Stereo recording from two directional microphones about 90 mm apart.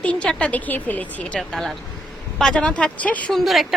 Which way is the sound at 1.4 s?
5° left (ahead or behind).